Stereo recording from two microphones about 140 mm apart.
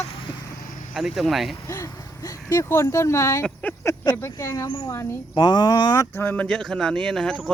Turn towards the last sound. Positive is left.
turn(degrees=5)  # may be behind; listen again after turning